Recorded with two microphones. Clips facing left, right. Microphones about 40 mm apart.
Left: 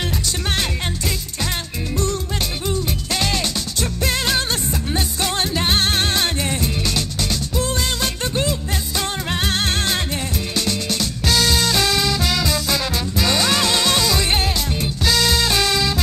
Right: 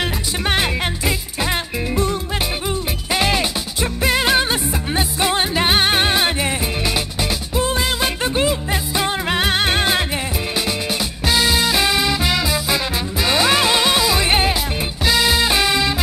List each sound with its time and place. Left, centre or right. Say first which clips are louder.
0.0 s music: right 3 dB; right